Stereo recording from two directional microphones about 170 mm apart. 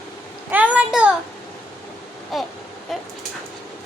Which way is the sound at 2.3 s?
Centre (ahead or behind).